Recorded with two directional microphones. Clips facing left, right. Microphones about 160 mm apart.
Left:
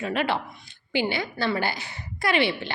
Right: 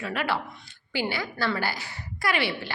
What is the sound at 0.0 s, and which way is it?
A woman's voice, 20° left (ahead or behind).